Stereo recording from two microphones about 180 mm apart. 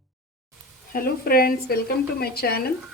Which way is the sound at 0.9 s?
55° left (ahead or behind).